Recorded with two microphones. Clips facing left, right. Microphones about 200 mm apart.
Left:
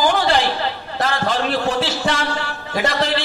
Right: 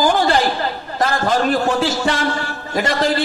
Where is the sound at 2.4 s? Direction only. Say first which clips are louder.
Right 1 dB; 45° right (ahead or behind).